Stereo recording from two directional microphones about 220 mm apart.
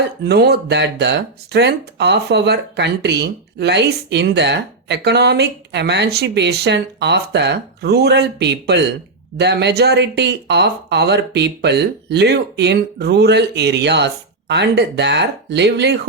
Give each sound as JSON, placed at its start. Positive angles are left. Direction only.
{"t": 0.2, "sound": "speech", "side_deg": -50}